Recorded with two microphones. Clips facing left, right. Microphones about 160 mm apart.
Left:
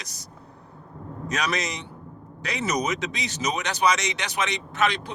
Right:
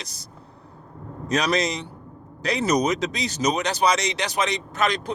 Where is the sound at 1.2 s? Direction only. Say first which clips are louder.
Right 5 dB; 35° right (ahead or behind).